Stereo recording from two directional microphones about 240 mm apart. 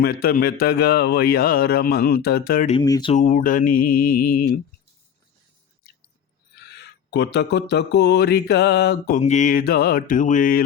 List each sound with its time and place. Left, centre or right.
0.0 s speech: left
2.7 s speech: centre
3.2 s speech: left
6.6 s speech: left